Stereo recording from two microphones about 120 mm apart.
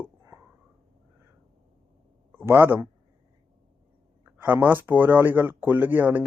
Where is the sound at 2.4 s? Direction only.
15° right (ahead or behind).